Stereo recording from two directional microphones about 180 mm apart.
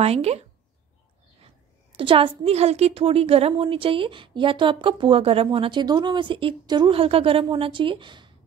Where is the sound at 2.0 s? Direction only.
30° right (ahead or behind).